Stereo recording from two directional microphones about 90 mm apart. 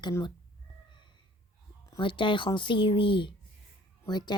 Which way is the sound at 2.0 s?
70° left (ahead or behind).